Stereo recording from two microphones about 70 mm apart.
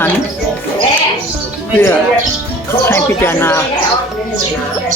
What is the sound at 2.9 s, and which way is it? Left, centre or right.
Speech, left.